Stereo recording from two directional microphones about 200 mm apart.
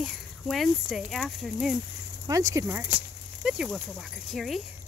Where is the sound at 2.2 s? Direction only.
15° right (ahead or behind).